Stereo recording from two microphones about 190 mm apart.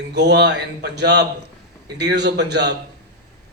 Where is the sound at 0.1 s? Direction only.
65° right (ahead or behind).